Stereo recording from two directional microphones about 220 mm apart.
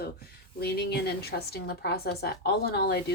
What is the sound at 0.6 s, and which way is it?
A woman's voice, 45° left (ahead or behind).